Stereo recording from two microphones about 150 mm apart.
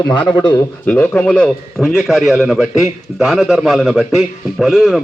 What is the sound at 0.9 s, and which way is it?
A man's voice, 15° left (ahead or behind).